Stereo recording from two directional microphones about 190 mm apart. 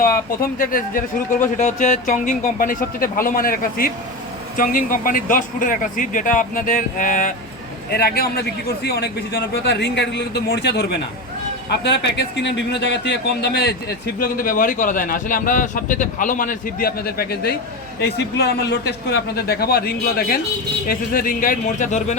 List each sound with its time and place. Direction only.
0.6 s a man's voice: 50° left (ahead or behind)
14.2 s a man's voice: 45° left (ahead or behind)